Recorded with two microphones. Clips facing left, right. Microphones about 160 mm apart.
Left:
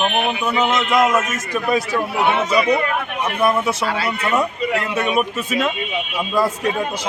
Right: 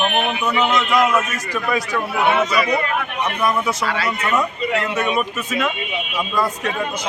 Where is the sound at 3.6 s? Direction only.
25° left (ahead or behind).